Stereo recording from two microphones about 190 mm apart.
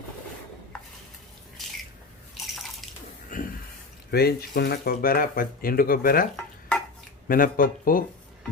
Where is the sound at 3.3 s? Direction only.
45° left (ahead or behind).